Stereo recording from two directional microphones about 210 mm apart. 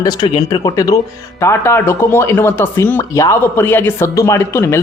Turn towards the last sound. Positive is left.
turn(degrees=10)  # may be behind; listen again after turning